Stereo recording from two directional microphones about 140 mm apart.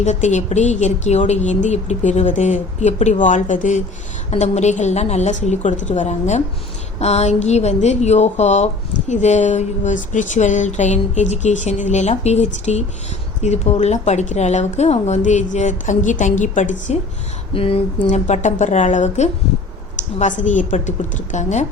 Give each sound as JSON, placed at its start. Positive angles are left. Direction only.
{"t": 0.0, "sound": "a woman's voice", "side_deg": 55}
{"t": 17.5, "sound": "a sound", "side_deg": 40}
{"t": 18.3, "sound": "a woman's voice", "side_deg": 60}